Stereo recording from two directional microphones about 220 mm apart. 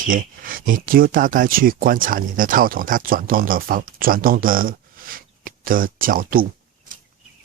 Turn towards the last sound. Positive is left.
turn(degrees=-40)  # may be behind; listen again after turning